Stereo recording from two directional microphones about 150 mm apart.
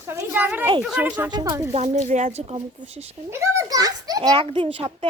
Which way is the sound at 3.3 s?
20° right (ahead or behind).